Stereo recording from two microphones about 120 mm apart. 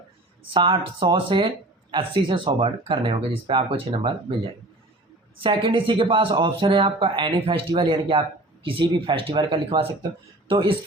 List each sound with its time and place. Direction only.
0.5 s speech: 45° right (ahead or behind)
5.4 s speech: 45° right (ahead or behind)